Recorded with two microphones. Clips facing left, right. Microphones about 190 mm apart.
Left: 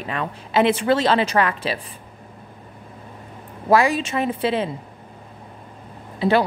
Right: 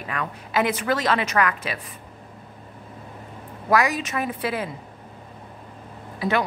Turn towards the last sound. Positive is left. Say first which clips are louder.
# left 5 dB
turn(degrees=30)  # may be behind; listen again after turning